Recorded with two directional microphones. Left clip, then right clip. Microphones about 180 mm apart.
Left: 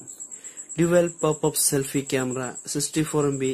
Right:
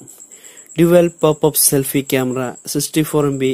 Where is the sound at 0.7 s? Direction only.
30° right (ahead or behind).